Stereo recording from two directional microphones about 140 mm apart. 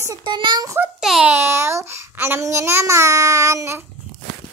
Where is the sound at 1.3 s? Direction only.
20° right (ahead or behind).